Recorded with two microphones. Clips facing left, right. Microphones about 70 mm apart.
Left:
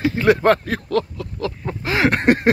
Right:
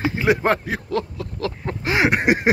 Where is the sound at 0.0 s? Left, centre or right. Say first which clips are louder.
Left 4 dB; centre.